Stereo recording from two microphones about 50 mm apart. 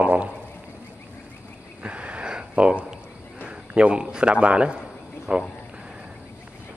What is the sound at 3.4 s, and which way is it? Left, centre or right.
A man's voice, right.